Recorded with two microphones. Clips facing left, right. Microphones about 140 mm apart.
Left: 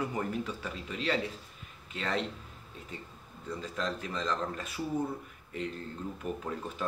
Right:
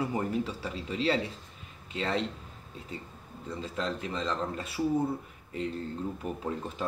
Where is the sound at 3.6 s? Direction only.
30° right (ahead or behind).